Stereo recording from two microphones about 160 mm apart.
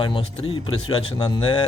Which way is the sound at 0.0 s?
30° left (ahead or behind).